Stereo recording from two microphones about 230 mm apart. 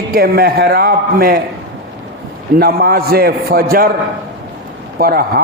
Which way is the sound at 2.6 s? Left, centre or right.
Right.